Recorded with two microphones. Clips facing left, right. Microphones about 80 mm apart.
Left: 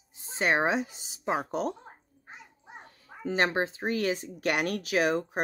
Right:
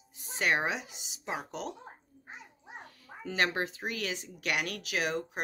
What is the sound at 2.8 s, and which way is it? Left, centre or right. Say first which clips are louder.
Speech: left 8 dB; left.